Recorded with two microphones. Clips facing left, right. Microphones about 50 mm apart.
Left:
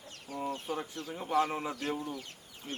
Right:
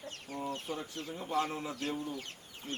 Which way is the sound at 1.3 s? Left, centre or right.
Left.